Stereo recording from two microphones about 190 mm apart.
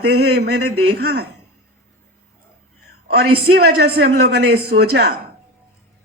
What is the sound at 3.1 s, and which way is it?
A woman's voice, 60° right (ahead or behind).